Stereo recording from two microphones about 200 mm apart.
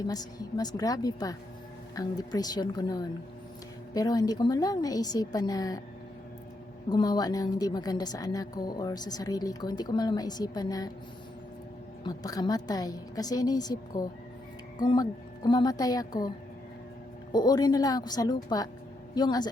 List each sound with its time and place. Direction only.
0.1 s a woman's voice: 20° left (ahead or behind)
6.9 s a woman's voice: 20° left (ahead or behind)
12.0 s a woman's voice: 20° left (ahead or behind)
17.3 s a woman's voice: 20° left (ahead or behind)